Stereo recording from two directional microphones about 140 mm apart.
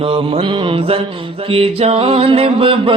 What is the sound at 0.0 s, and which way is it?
Music, 40° right (ahead or behind).